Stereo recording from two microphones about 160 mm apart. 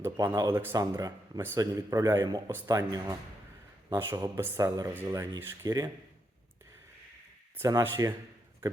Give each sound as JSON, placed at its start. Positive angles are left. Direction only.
{"t": 0.0, "sound": "speech", "side_deg": -20}
{"t": 7.6, "sound": "speech", "side_deg": -20}